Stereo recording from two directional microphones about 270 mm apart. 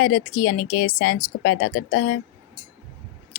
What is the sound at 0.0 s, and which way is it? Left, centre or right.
Speech, left.